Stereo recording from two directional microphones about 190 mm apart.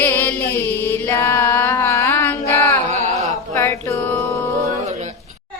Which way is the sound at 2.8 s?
35° right (ahead or behind).